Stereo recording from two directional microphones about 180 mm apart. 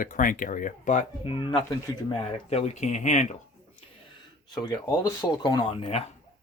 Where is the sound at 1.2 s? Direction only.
30° left (ahead or behind).